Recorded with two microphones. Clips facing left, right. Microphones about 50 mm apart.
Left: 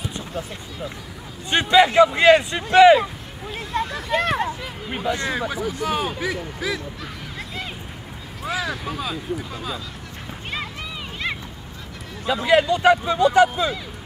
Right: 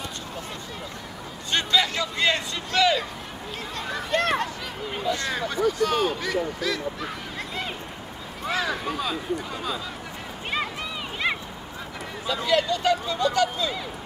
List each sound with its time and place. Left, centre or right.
1.5 s speech: left
3.8 s speech: centre
4.4 s a sound: centre
5.3 s speech: centre
7.0 s honk: centre
8.5 s speech: centre
10.5 s a sound: centre
12.4 s speech: left